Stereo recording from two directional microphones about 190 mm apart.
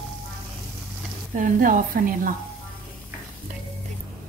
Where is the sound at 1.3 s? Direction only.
45° right (ahead or behind).